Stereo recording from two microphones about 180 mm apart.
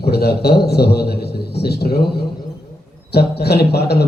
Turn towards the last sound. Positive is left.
turn(degrees=65)  # may be behind; listen again after turning